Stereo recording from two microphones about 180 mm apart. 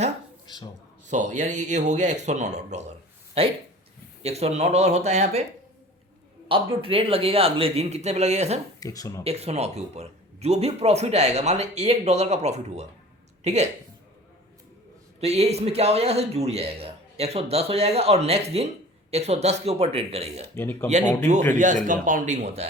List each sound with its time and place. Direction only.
1.0 s speech: 40° right (ahead or behind)
6.5 s speech: 30° right (ahead or behind)
8.8 s speech: 20° left (ahead or behind)
9.2 s speech: 35° right (ahead or behind)
15.2 s speech: 35° right (ahead or behind)
20.6 s speech: 15° left (ahead or behind)
21.5 s a man's voice: 45° right (ahead or behind)